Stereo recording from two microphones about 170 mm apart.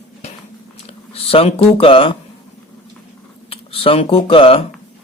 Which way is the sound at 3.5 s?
35° left (ahead or behind).